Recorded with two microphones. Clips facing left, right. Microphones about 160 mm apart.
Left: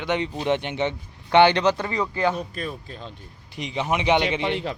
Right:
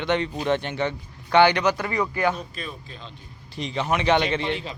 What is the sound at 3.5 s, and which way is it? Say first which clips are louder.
Speech: even; 15° left (ahead or behind).